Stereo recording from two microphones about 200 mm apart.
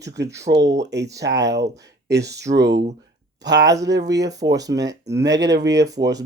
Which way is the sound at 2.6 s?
60° right (ahead or behind).